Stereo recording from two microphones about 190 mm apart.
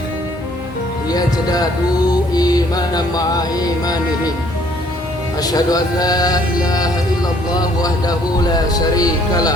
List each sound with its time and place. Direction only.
1.1 s speech: 20° left (ahead or behind)
5.4 s speech: 20° left (ahead or behind)